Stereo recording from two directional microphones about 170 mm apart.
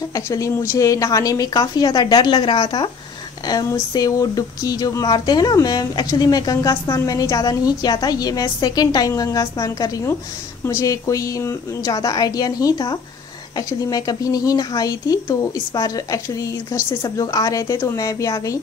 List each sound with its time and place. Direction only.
0.1 s speech: 20° left (ahead or behind)